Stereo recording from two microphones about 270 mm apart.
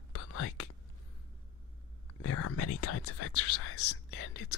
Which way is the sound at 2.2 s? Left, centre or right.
Left.